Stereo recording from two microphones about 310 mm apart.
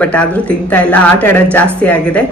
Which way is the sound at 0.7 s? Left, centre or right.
Centre.